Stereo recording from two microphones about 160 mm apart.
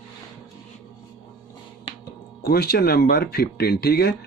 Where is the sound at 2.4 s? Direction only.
75° left (ahead or behind).